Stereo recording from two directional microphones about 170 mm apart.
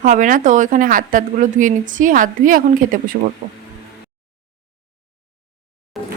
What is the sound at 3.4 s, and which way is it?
Speech, 70° right (ahead or behind).